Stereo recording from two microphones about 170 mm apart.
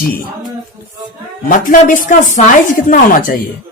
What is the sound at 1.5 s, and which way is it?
Speech, 50° left (ahead or behind).